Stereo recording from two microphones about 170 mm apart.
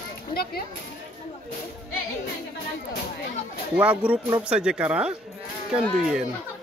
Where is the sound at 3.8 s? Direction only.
5° right (ahead or behind).